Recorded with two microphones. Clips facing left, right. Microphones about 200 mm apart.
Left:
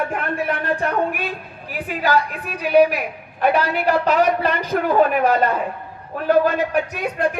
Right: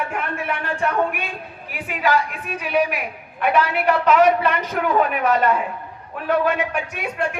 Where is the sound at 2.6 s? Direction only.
35° left (ahead or behind).